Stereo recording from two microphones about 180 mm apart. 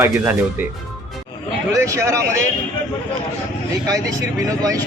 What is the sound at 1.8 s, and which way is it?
Speech, 15° right (ahead or behind).